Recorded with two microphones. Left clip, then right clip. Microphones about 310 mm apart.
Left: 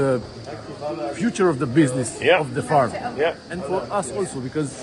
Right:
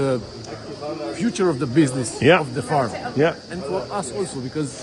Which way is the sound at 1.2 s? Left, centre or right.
Centre.